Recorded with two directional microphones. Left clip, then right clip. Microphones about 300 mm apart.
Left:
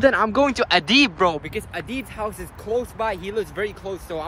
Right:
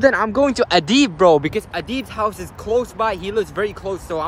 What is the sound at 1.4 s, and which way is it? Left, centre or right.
Speech, centre.